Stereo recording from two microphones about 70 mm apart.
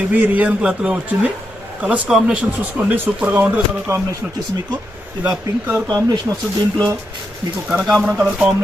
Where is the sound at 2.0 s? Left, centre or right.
Centre.